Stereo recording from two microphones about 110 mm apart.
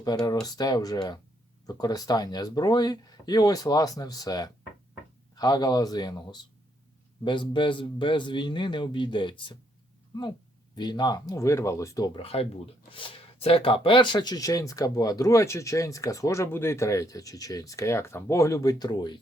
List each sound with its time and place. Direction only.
0.0 s a man's voice: 35° left (ahead or behind)
10.8 s speech: 40° left (ahead or behind)
11.3 s speech: 25° left (ahead or behind)
12.1 s speech: 60° left (ahead or behind); by 19.2 s 40° left (ahead or behind)